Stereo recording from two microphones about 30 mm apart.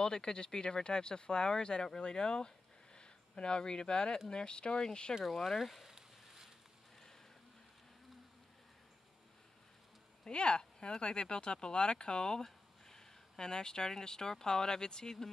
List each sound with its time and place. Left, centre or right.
0.0 s speech: left
5.2 s speech: centre
5.9 s a sound: centre
10.2 s speech: left